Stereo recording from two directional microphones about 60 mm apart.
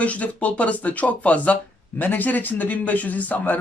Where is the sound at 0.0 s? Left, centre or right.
Left.